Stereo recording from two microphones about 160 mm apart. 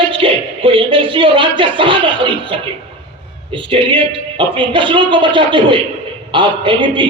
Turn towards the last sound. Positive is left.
turn(degrees=-30)  # may be behind; listen again after turning